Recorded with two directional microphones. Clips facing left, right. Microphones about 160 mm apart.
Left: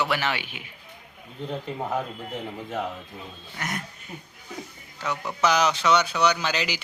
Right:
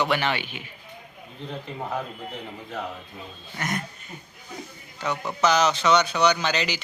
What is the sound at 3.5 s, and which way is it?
Speech, 5° left (ahead or behind).